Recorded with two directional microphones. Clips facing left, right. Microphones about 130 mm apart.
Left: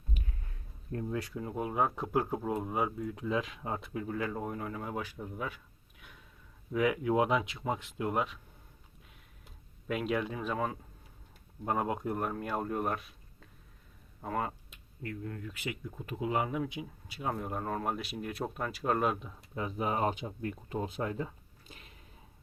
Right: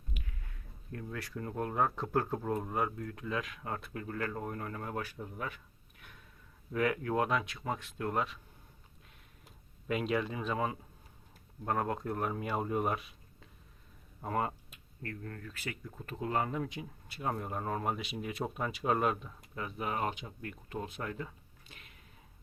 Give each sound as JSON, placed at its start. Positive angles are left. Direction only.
{"t": 0.9, "sound": "speech", "side_deg": 20}
{"t": 3.9, "sound": "speech", "side_deg": 5}
{"t": 6.7, "sound": "speech", "side_deg": 5}
{"t": 9.4, "sound": "speech", "side_deg": 0}
{"t": 11.6, "sound": "speech", "side_deg": 10}
{"t": 15.0, "sound": "speech", "side_deg": 15}
{"t": 19.5, "sound": "speech", "side_deg": 25}
{"t": 21.7, "sound": "a sound", "side_deg": 35}